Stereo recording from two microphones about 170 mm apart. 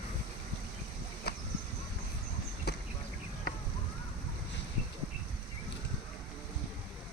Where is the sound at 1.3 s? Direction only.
70° left (ahead or behind).